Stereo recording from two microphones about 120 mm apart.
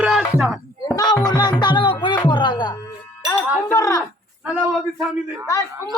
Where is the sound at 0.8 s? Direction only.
30° left (ahead or behind).